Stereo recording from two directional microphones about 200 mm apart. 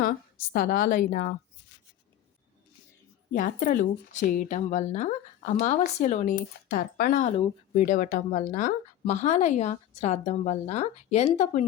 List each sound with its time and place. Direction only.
0.5 s speech: 45° left (ahead or behind)
3.3 s speech: 45° left (ahead or behind)
6.7 s speech: 45° left (ahead or behind)